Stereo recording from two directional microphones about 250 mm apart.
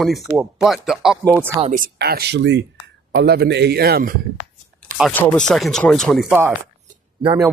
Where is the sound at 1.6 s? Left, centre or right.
Right.